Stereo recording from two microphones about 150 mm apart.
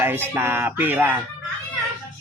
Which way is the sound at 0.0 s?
15° right (ahead or behind).